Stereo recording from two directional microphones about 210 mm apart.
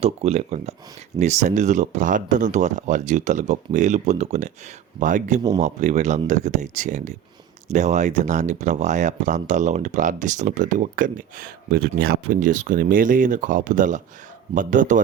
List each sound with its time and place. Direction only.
0.0 s speech: 30° right (ahead or behind)